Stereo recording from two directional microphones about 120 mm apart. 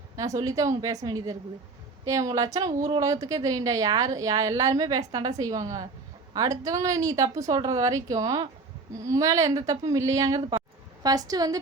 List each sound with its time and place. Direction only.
0.2 s a woman's voice: 30° right (ahead or behind)